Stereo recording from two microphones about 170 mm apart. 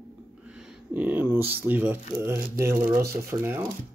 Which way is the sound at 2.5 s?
15° right (ahead or behind).